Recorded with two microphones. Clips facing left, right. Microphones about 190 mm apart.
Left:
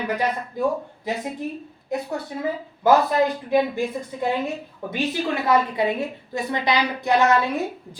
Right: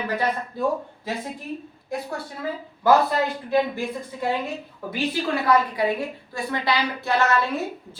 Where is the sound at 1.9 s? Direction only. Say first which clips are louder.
Left 3 dB; 20° left (ahead or behind).